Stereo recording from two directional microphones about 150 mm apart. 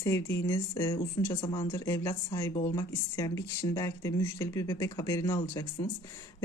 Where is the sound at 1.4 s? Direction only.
35° left (ahead or behind).